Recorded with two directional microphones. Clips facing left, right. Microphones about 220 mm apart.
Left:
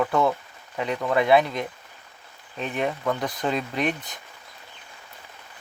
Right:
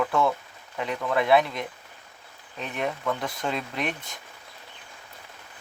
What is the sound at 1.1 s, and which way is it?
Speech, centre (ahead or behind).